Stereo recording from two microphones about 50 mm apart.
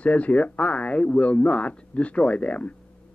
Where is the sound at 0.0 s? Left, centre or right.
Left.